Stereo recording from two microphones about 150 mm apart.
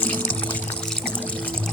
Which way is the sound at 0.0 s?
10° left (ahead or behind).